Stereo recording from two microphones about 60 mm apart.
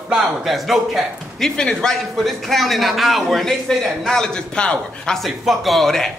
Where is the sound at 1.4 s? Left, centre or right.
Centre.